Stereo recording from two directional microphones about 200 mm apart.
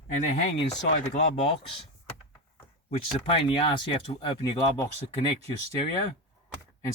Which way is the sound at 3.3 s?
25° left (ahead or behind).